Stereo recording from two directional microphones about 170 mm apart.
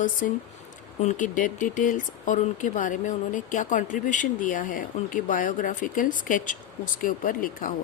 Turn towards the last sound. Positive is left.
turn(degrees=55)  # may be behind; listen again after turning